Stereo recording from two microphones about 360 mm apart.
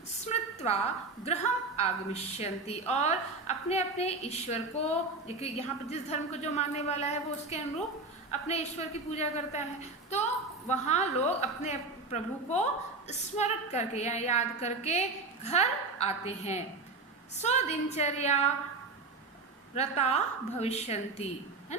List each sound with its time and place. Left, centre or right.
0.3 s a sound: centre
1.2 s a woman's voice: centre
10.7 s a woman's voice: centre
19.7 s a woman's voice: centre